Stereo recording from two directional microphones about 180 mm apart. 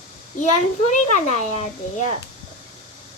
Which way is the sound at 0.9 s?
45° left (ahead or behind).